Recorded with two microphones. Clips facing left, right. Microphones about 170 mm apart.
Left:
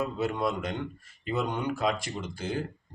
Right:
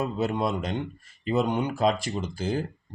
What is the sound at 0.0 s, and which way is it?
Speech, 25° right (ahead or behind).